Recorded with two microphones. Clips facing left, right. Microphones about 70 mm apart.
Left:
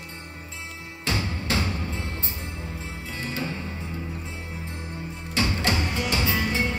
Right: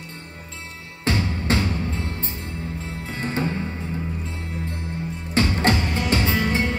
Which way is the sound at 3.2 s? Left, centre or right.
Right.